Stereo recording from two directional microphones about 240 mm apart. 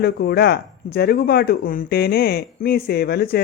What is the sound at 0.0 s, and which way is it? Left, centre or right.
Speech, left.